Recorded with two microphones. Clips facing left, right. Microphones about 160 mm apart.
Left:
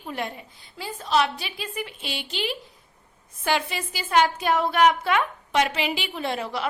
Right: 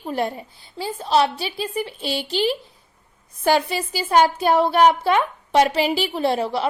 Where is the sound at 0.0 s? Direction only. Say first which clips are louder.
Right 7 dB; 35° right (ahead or behind).